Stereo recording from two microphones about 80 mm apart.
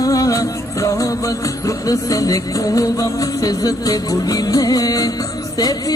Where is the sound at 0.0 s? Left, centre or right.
Left.